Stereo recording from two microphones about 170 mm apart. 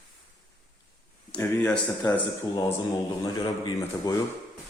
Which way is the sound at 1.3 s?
5° left (ahead or behind).